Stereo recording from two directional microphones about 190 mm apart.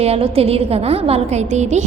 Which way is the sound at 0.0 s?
30° right (ahead or behind).